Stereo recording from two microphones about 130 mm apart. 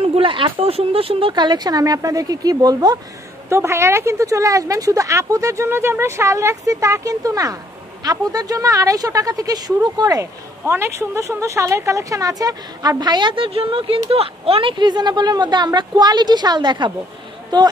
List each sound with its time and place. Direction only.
0.0 s speech: 45° right (ahead or behind)